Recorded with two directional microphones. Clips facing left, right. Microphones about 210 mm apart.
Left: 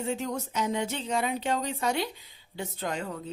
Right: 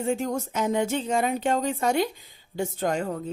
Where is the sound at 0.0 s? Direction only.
50° right (ahead or behind).